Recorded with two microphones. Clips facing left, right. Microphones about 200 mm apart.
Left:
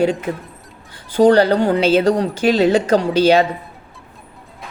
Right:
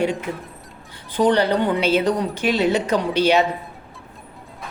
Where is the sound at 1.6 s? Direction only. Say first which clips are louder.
Left 5 dB; 90° left.